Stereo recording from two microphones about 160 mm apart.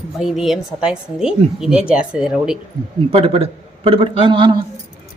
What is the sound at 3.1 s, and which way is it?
A man's voice, 40° right (ahead or behind).